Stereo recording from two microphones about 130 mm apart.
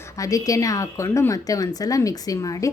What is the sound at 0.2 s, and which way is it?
Speech, 25° left (ahead or behind).